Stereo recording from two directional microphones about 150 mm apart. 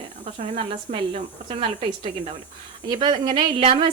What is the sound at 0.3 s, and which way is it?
Speech, 50° right (ahead or behind).